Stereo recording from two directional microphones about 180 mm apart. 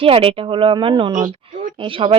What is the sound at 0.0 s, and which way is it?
Speech, 30° right (ahead or behind).